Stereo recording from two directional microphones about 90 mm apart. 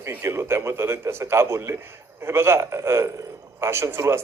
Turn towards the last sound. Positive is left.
turn(degrees=-30)  # may be behind; listen again after turning